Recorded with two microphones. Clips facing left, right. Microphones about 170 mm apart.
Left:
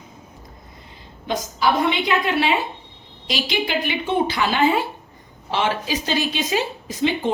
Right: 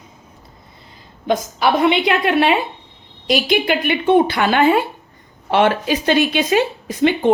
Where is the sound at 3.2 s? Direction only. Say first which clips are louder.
Right 7 dB; 50° right (ahead or behind).